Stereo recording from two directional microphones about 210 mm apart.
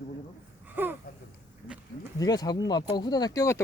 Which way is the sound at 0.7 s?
10° right (ahead or behind).